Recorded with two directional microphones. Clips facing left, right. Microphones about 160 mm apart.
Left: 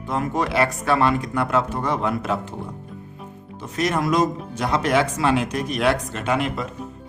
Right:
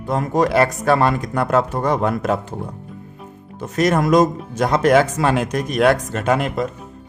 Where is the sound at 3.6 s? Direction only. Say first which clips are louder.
Right 5 dB; 45° right (ahead or behind).